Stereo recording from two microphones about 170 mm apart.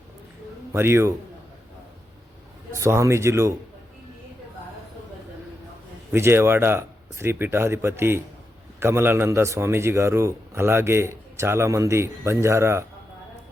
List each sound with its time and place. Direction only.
0.7 s a man's voice: 15° right (ahead or behind)
2.7 s a man's voice: 15° right (ahead or behind)
6.1 s a man's voice: 15° right (ahead or behind)